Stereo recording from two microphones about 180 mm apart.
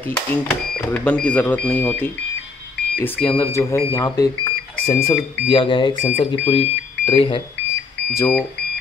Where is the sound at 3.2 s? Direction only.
15° left (ahead or behind); by 7.4 s 30° left (ahead or behind).